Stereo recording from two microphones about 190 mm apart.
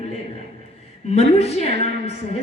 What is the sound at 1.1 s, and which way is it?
Speech, 35° left (ahead or behind).